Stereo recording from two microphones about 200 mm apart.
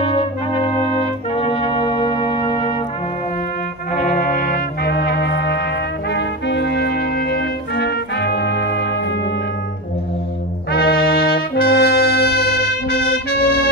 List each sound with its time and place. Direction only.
0.0 s trumpet: 25° left (ahead or behind)
1.3 s brass instrument: 30° left (ahead or behind)
4.3 s trumpet: 50° left (ahead or behind)
10.7 s brass instrument: 50° left (ahead or behind)